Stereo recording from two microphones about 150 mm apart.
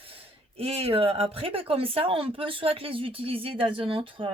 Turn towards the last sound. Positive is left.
turn(degrees=-35)  # may be behind; listen again after turning